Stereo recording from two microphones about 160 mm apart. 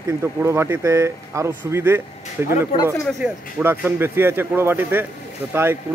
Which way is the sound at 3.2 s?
10° right (ahead or behind).